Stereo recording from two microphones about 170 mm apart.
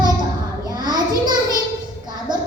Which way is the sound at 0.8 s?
25° right (ahead or behind).